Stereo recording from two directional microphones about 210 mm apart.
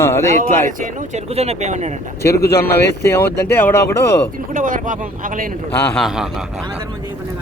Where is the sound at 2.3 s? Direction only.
50° left (ahead or behind).